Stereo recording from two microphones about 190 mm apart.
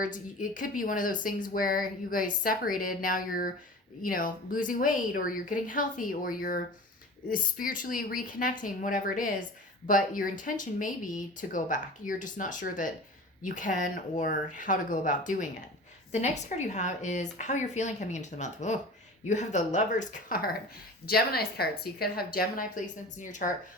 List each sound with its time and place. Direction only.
0.0 s speech: 45° left (ahead or behind)